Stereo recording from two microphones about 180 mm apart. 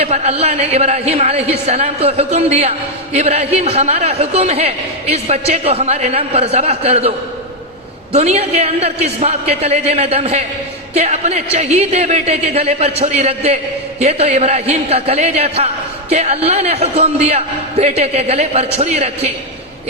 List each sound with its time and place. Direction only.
0.0 s a woman's voice: 35° right (ahead or behind)
8.1 s a woman's voice: 35° right (ahead or behind)